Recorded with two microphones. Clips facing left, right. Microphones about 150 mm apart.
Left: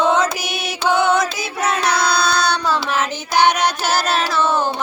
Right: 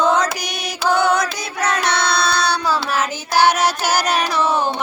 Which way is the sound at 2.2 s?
5° right (ahead or behind).